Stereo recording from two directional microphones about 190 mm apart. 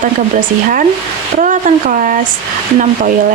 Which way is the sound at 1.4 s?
45° right (ahead or behind).